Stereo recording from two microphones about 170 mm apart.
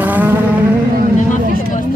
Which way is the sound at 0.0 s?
10° right (ahead or behind).